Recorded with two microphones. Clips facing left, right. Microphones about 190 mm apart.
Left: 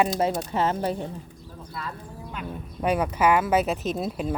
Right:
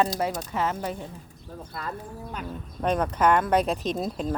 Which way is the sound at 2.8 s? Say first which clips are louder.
Left 1 dB; 10° left (ahead or behind).